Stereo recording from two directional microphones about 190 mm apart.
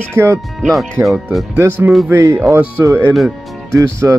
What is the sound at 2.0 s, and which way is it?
Speech, 15° right (ahead or behind).